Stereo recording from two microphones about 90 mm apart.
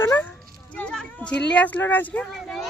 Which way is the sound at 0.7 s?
10° left (ahead or behind).